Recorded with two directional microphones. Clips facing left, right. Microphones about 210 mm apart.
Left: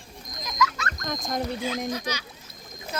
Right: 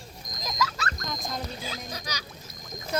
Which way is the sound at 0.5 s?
30° right (ahead or behind).